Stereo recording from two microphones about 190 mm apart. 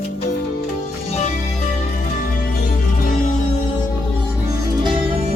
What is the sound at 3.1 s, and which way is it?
Music, 45° left (ahead or behind).